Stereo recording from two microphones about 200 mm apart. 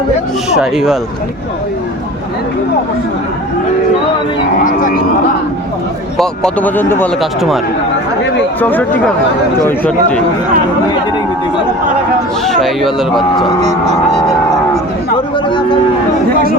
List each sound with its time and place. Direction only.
0.5 s speech: centre (ahead or behind)
6.1 s speech: 5° left (ahead or behind)
8.6 s speech: 10° left (ahead or behind)
12.5 s speech: centre (ahead or behind)
13.6 s speech: 35° right (ahead or behind)
15.4 s speech: 25° left (ahead or behind)